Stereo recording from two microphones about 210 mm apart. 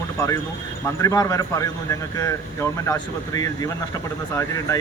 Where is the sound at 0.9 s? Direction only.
15° left (ahead or behind).